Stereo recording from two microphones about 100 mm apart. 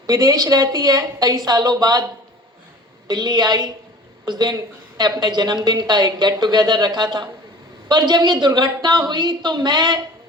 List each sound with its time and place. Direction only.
0.1 s a woman's voice: 40° right (ahead or behind)
3.1 s a woman's voice: 45° right (ahead or behind)